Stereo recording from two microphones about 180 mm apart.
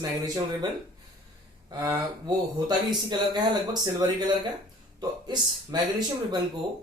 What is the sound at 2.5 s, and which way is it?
Speech, 25° right (ahead or behind).